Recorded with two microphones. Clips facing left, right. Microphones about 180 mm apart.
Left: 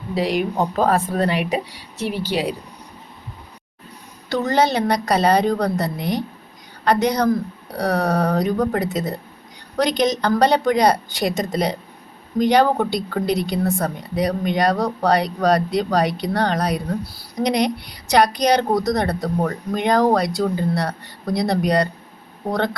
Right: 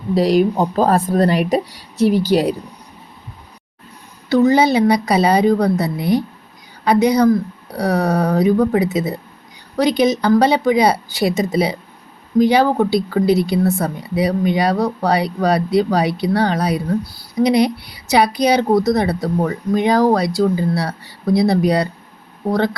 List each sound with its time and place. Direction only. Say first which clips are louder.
0.1 s speech: right 7 dB; 40° right (ahead or behind)
4.3 s speech: right 6 dB; 10° right (ahead or behind)